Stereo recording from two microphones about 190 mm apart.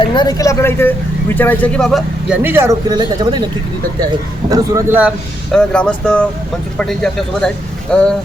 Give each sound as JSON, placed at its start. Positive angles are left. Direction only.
{"t": 0.0, "sound": "speech", "side_deg": 25}
{"t": 2.4, "sound": "speech", "side_deg": -10}
{"t": 4.4, "sound": "speech", "side_deg": -20}
{"t": 5.5, "sound": "speech", "side_deg": 5}